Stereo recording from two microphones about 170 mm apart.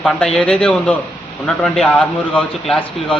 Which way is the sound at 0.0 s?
5° left (ahead or behind).